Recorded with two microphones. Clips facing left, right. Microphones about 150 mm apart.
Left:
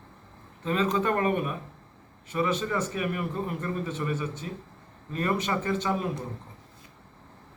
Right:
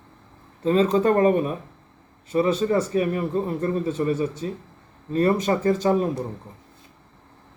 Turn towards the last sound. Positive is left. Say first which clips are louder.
# right 8 dB
turn(degrees=-40)  # may be behind; listen again after turning